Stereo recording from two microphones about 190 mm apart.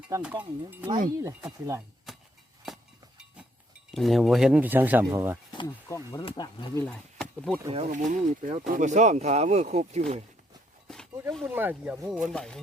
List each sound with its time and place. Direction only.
0.2 s speech: 5° right (ahead or behind)
2.1 s chop: centre (ahead or behind)
3.9 s speech: centre (ahead or behind)
5.5 s speech: 20° left (ahead or behind)
6.8 s speech: 5° left (ahead or behind)
7.7 s speech: 35° right (ahead or behind)
10.8 s a sound: 5° left (ahead or behind)
11.4 s speech: 10° right (ahead or behind)